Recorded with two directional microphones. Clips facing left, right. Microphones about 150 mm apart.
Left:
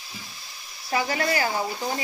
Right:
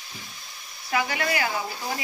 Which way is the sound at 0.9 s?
30° left (ahead or behind).